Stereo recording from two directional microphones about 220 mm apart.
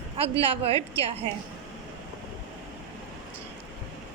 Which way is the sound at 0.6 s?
25° right (ahead or behind).